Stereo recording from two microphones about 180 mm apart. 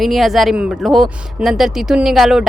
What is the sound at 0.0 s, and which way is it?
Speech, centre (ahead or behind).